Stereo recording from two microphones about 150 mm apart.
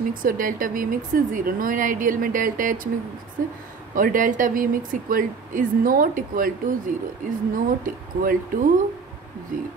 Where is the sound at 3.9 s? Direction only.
65° right (ahead or behind).